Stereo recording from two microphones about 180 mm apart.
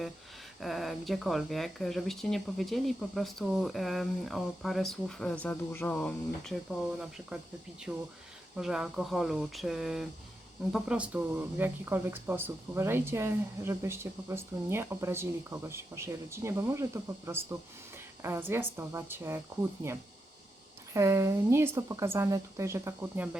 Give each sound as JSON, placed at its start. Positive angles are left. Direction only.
{"t": 0.6, "sound": "speech", "side_deg": 0}
{"t": 20.9, "sound": "speech", "side_deg": -15}